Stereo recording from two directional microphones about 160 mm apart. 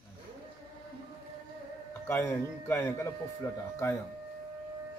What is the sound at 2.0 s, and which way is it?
A man's voice, 15° left (ahead or behind).